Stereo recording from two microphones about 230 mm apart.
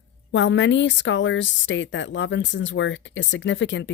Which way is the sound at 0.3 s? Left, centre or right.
Left.